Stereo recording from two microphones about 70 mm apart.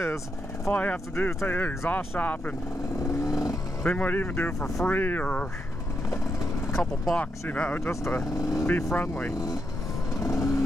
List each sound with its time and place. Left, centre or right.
0.7 s speech: left
0.9 s speech: left
3.0 s vehicle: left
3.8 s speech: left
4.6 s speech: centre
4.8 s speech: left
6.8 s speech: centre
7.8 s speech: left
8.4 s speech: left
8.9 s speech: left
10.1 s vehicle: left